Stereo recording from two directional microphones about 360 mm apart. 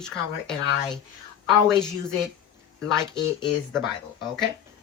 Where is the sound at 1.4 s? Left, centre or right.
Centre.